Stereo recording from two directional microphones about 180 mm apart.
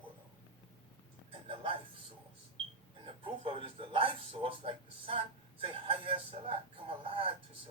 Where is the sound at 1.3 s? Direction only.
30° right (ahead or behind).